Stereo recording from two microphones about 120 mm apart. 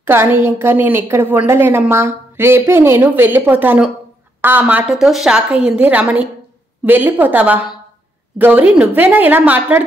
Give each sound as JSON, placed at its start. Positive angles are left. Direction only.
{"t": 0.0, "sound": "a woman's voice", "side_deg": -20}